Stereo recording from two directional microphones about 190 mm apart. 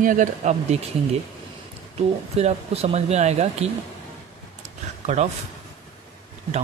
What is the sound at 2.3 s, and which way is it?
Speech, 35° right (ahead or behind).